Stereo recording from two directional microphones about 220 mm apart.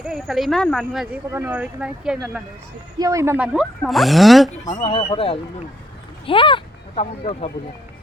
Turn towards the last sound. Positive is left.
turn(degrees=30)  # may be behind; listen again after turning